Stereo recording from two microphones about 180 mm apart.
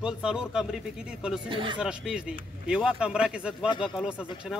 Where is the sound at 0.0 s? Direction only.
5° right (ahead or behind).